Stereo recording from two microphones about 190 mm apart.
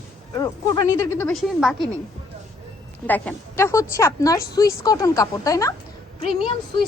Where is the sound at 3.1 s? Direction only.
10° left (ahead or behind).